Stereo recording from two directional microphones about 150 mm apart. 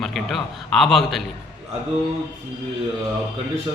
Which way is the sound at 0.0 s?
Centre (ahead or behind).